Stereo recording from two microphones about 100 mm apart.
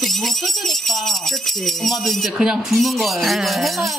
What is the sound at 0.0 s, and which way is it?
Speech, centre (ahead or behind).